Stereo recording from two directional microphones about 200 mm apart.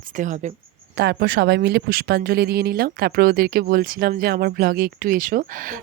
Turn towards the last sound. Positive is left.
turn(degrees=-40)  # may be behind; listen again after turning